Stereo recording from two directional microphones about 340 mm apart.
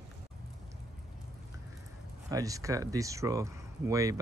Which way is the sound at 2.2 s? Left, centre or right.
Centre.